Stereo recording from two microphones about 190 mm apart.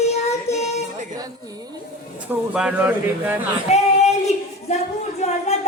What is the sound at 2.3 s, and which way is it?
Speech, 5° right (ahead or behind).